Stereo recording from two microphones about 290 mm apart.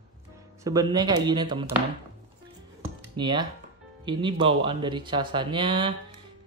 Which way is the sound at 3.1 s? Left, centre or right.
Centre.